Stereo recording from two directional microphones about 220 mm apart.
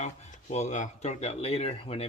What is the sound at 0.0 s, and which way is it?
Speech, 30° left (ahead or behind).